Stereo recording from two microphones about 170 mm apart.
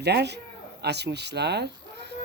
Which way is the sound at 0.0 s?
80° right.